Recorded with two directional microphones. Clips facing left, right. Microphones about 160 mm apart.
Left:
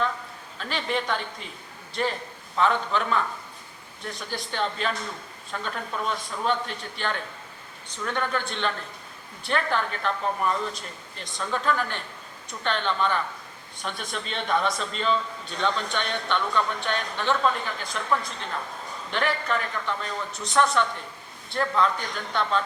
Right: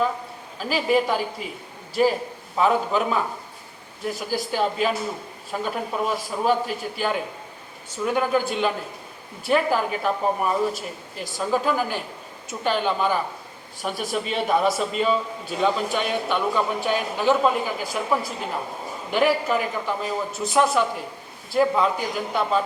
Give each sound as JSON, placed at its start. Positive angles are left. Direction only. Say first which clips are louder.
{"t": 0.6, "sound": "a man's voice", "louder": "right 8 dB", "side_deg": -5}